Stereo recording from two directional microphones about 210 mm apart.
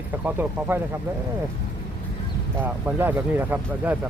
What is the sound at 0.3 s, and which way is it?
Speech, 10° right (ahead or behind).